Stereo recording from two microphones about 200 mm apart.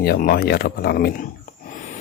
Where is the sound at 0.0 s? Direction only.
50° left (ahead or behind).